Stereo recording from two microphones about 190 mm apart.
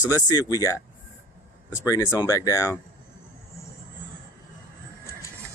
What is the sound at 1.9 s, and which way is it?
Speech, 20° left (ahead or behind).